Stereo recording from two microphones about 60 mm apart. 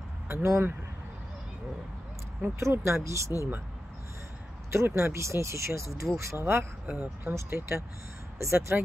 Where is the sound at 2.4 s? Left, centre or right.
Right.